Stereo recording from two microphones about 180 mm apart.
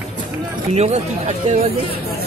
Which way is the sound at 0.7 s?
35° right (ahead or behind).